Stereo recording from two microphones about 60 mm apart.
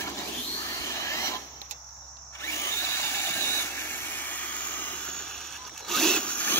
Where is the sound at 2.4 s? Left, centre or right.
Left.